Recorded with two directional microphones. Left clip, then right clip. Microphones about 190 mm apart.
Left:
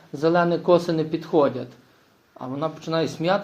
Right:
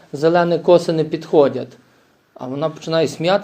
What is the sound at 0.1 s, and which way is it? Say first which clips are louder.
Speech: right 5 dB; 30° right (ahead or behind).